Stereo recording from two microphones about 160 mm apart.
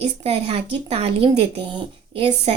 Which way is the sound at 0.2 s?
40° right (ahead or behind).